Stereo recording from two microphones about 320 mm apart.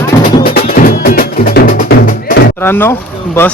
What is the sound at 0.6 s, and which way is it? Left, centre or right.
Music, left.